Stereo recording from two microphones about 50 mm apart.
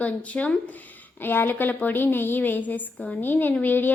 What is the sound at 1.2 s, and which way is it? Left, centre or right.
A woman's voice, left.